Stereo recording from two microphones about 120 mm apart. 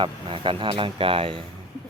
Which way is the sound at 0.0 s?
45° right (ahead or behind).